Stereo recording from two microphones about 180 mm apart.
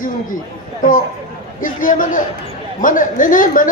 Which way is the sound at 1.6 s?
50° left (ahead or behind).